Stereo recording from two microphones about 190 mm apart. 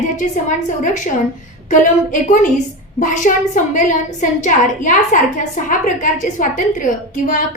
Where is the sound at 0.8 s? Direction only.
40° left (ahead or behind).